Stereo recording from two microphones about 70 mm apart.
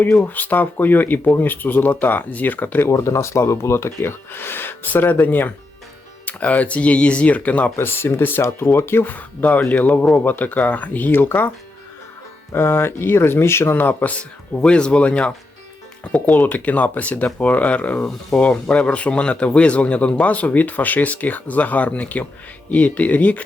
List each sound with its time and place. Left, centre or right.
0.3 s a man's voice: left
2.9 s a man's voice: left
7.8 s a man's voice: left
12.5 s a man's voice: left; by 15.3 s centre
16.3 s a man's voice: left